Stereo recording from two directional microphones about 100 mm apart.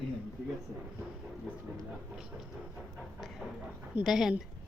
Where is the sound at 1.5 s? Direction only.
10° right (ahead or behind).